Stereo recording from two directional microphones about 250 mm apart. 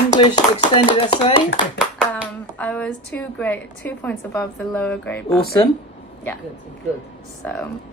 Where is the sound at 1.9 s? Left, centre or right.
Centre.